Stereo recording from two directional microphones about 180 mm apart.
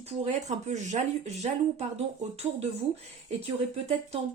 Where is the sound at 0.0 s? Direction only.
40° right (ahead or behind).